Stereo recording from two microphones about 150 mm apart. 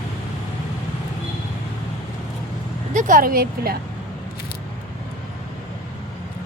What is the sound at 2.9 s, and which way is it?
Speech, 60° right (ahead or behind).